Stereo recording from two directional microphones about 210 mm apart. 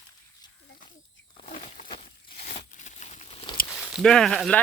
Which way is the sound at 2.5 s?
35° left (ahead or behind).